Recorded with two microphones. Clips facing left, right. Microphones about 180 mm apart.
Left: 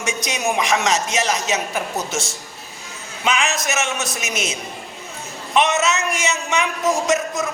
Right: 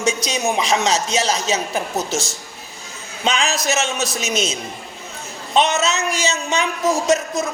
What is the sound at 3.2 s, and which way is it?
Speech, 30° right (ahead or behind).